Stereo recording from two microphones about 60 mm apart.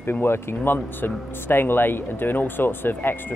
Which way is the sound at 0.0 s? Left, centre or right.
Left.